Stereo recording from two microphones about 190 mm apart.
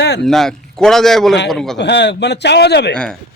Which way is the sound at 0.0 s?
65° left (ahead or behind).